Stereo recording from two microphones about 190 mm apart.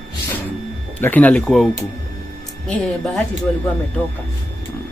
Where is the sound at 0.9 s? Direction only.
10° left (ahead or behind).